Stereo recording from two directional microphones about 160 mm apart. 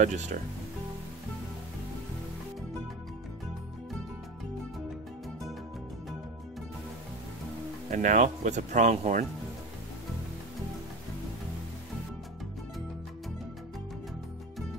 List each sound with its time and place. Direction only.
0.0 s speech: 50° right (ahead or behind)
7.9 s speech: 55° right (ahead or behind)